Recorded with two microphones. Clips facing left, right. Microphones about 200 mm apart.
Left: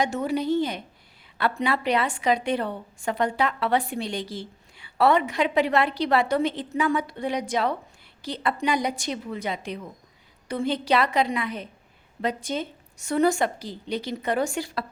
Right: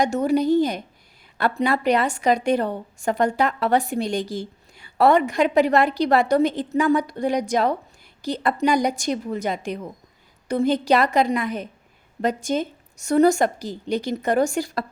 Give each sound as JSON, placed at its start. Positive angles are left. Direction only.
{"t": 0.0, "sound": "a woman's voice", "side_deg": -45}